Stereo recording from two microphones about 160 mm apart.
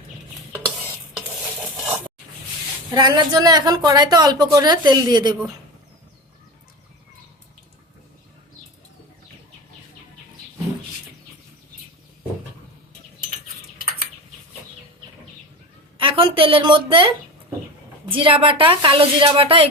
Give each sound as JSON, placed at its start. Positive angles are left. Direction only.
{"t": 2.9, "sound": "speech", "side_deg": -25}
{"t": 16.0, "sound": "a woman's voice", "side_deg": -35}